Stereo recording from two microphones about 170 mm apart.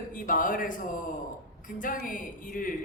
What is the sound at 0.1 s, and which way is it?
Speech, 55° left (ahead or behind).